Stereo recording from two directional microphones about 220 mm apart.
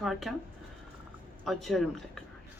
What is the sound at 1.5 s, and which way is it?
Speech, centre (ahead or behind).